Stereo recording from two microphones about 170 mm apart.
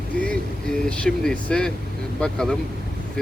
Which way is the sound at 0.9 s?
5° left (ahead or behind).